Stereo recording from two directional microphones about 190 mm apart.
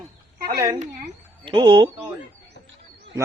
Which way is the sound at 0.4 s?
20° right (ahead or behind).